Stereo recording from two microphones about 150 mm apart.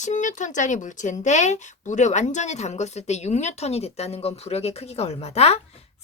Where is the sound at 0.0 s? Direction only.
55° left (ahead or behind).